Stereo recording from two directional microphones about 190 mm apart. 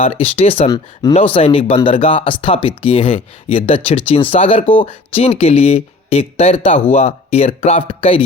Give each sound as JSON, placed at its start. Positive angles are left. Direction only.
{"t": 0.0, "sound": "speech", "side_deg": 30}